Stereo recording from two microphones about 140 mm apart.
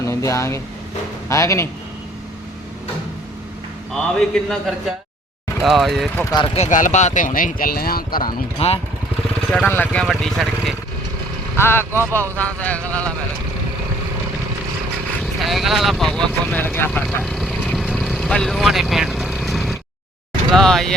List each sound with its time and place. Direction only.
0.0 s speech: 20° left (ahead or behind)
3.9 s speech: centre (ahead or behind)
6.3 s speech: 35° left (ahead or behind)
6.6 s speech: 65° left (ahead or behind); by 8.2 s 90° left
8.5 s speech: 45° left (ahead or behind)
9.5 s speech: 10° left (ahead or behind)
11.5 s speech: 15° left (ahead or behind)
15.2 s speech: centre (ahead or behind)
16.3 s speech: 15° left (ahead or behind)
17.2 s vehicle: centre (ahead or behind)
20.5 s speech: centre (ahead or behind)